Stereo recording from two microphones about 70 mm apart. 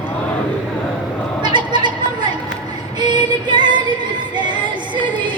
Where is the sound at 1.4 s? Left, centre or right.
Right.